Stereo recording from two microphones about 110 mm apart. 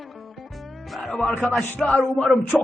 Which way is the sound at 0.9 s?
Centre (ahead or behind).